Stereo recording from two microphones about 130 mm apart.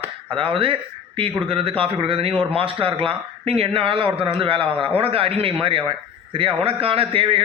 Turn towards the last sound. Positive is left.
turn(degrees=-45)  # may be behind; listen again after turning